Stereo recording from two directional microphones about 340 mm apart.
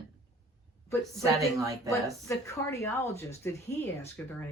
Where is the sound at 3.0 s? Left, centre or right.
Centre.